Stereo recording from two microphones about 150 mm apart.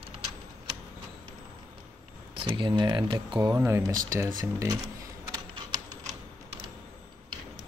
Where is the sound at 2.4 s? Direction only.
35° right (ahead or behind); by 4.8 s 15° right (ahead or behind).